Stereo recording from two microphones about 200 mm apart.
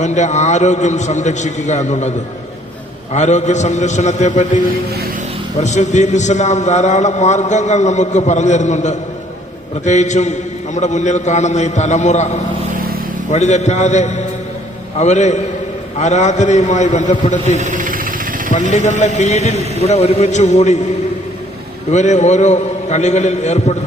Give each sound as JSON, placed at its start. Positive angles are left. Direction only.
{"t": 0.0, "sound": "a man's voice", "side_deg": 35}
{"t": 17.6, "sound": "engine", "side_deg": -40}
{"t": 18.5, "sound": "a man's voice", "side_deg": 40}
{"t": 21.9, "sound": "a man's voice", "side_deg": 35}